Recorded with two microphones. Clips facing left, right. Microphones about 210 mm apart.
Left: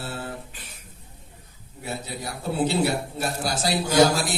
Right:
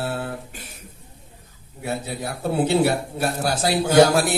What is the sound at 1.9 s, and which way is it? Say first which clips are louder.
A man's voice: right 5 dB; 55° right (ahead or behind).